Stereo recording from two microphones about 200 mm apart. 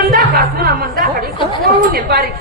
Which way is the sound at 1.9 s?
55° right (ahead or behind).